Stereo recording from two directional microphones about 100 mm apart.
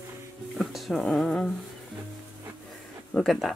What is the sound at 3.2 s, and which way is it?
Speech, centre (ahead or behind).